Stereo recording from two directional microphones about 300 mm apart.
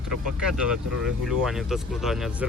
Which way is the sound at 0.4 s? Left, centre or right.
Centre.